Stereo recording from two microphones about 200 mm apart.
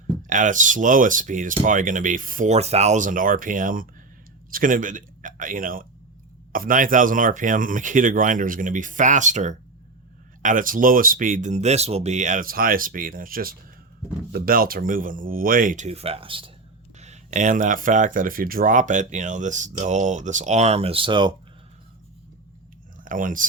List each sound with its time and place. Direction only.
0.3 s speech: 40° right (ahead or behind); by 21.3 s 25° right (ahead or behind)
23.0 s speech: 40° right (ahead or behind)